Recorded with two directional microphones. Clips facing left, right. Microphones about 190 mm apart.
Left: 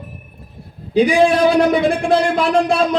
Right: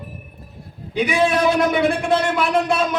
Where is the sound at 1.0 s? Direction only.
30° left (ahead or behind).